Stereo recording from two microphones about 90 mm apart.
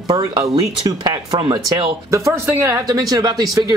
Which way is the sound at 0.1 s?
45° right (ahead or behind).